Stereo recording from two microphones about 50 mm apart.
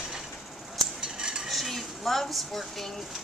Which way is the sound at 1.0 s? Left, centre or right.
Centre.